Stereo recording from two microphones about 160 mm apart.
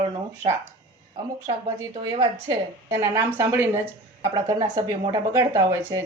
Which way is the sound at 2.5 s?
15° right (ahead or behind).